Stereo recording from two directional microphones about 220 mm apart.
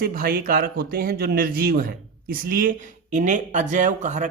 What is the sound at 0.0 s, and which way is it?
A man's voice, 40° right (ahead or behind).